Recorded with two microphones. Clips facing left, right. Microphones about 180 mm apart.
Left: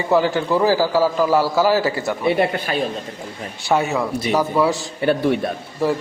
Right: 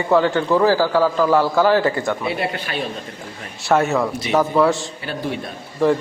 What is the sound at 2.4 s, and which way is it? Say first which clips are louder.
Speech: left 5 dB; 40° left (ahead or behind).